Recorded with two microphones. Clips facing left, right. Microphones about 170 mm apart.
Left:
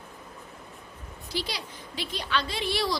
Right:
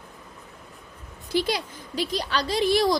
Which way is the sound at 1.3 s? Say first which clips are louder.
Right 9 dB; 50° right (ahead or behind).